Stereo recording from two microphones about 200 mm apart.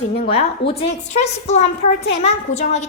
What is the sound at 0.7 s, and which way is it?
A woman's voice, 30° left (ahead or behind).